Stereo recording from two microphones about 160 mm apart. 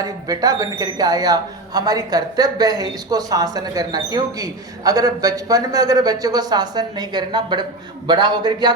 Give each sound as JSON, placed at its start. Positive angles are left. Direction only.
{"t": 0.0, "sound": "speech", "side_deg": -20}